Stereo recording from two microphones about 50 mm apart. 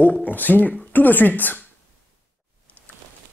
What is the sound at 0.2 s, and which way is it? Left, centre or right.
Speech, left.